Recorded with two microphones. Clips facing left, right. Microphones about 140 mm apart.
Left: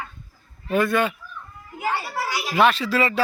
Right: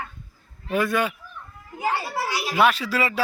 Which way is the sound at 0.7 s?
10° right (ahead or behind).